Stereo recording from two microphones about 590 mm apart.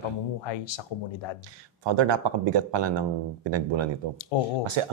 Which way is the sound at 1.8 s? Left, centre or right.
Right.